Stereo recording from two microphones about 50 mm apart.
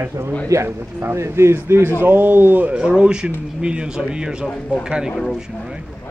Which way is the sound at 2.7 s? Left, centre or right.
Centre.